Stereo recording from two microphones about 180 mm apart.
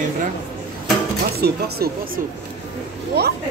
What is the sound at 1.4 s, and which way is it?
Speech, 60° right (ahead or behind).